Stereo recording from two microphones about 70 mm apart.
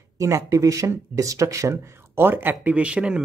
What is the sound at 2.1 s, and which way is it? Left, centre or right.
Speech, right.